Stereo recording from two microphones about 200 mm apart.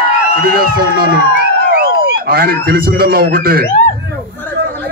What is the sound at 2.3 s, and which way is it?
A man's voice, 50° right (ahead or behind).